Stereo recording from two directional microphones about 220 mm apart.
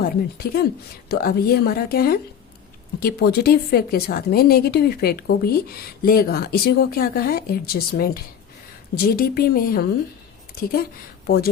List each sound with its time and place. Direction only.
0.0 s a woman's voice: 45° left (ahead or behind)